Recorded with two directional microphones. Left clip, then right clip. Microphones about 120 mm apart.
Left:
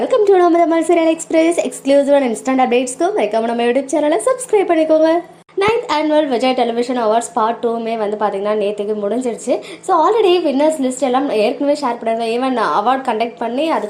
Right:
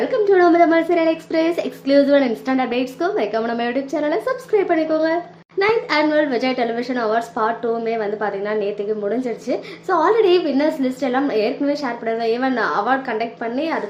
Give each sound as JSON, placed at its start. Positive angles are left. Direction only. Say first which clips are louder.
{"t": 0.1, "sound": "a sound", "louder": "left 5 dB", "side_deg": 40}
{"t": 0.5, "sound": "speech", "louder": "left 2 dB", "side_deg": 40}
{"t": 0.9, "sound": "a woman's voice", "louder": "left 4 dB", "side_deg": 25}
{"t": 5.5, "sound": "a woman's voice", "louder": "left 2 dB", "side_deg": 20}